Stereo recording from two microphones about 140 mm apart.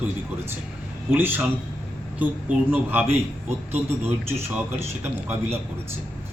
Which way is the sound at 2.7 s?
15° right (ahead or behind).